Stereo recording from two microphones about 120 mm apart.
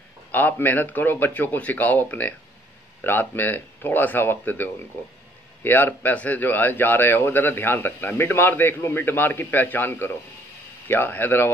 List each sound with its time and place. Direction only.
0.3 s a man's voice: 15° left (ahead or behind)